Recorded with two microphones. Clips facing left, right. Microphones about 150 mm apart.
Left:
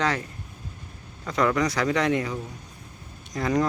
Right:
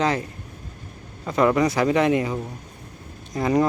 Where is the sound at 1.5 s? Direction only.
25° right (ahead or behind).